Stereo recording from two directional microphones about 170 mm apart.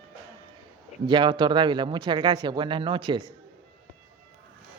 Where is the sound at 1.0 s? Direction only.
30° right (ahead or behind).